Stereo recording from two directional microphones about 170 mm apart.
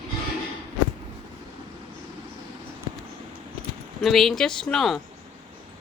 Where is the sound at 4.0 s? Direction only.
Centre (ahead or behind).